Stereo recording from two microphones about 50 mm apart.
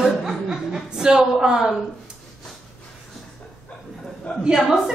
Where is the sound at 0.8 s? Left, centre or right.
Centre.